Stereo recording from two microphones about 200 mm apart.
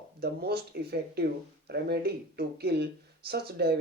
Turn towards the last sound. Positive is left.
turn(degrees=-55)  # may be behind; listen again after turning